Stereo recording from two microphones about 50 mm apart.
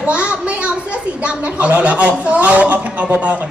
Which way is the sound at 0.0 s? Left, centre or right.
Right.